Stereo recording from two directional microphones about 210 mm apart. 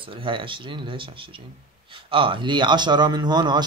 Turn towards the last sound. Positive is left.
turn(degrees=-20)  # may be behind; listen again after turning